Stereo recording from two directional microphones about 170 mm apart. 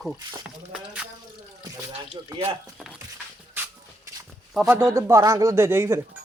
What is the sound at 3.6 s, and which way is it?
Shuffle, 10° right (ahead or behind).